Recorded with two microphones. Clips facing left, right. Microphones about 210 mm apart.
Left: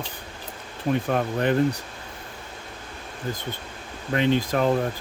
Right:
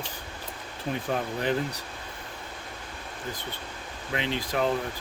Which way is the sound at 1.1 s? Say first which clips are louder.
Left 5 dB; 65° left (ahead or behind).